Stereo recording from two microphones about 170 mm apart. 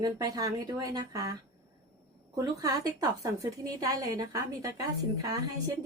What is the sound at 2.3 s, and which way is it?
Speech, 20° right (ahead or behind).